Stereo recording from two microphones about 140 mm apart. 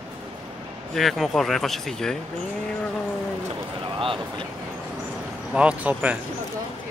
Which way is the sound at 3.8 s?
40° right (ahead or behind).